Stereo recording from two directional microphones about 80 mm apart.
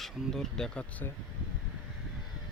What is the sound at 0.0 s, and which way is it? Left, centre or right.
Speech, centre.